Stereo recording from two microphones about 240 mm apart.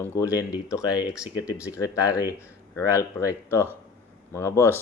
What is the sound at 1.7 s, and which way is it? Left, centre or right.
Speech, centre.